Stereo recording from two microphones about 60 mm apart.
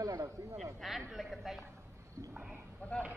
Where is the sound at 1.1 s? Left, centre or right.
Centre.